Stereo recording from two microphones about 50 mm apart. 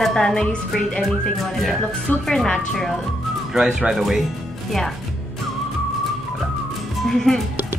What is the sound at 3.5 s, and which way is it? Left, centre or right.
Speech, centre.